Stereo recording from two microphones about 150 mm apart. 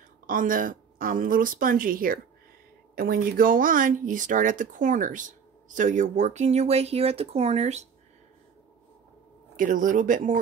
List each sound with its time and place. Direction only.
0.3 s speech: 65° right (ahead or behind); by 7.9 s 50° right (ahead or behind)
9.6 s speech: 60° right (ahead or behind)